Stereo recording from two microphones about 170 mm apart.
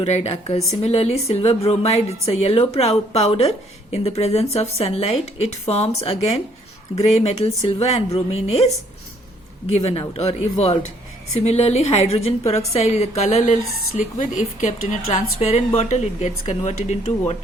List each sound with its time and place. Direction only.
0.0 s speech: 35° left (ahead or behind)
9.7 s speech: 35° left (ahead or behind)
15.4 s speech: 40° left (ahead or behind)